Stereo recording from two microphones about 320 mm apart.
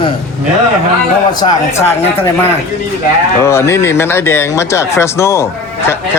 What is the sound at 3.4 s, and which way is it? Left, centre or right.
Speech, centre.